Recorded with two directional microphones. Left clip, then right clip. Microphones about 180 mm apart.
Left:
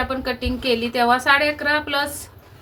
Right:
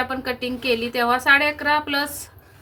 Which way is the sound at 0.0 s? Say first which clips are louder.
Left 1 dB; 10° right (ahead or behind).